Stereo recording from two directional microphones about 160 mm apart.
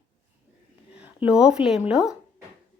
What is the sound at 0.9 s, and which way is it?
Speech, 5° right (ahead or behind).